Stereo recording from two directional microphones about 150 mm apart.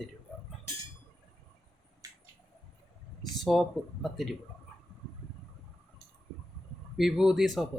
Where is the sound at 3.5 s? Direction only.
5° left (ahead or behind).